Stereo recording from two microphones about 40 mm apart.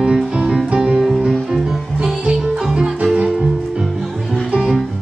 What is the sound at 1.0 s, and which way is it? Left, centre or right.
Music, centre.